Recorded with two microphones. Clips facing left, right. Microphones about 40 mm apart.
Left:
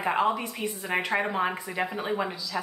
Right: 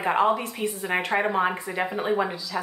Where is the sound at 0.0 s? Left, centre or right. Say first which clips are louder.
Right 3 dB; centre.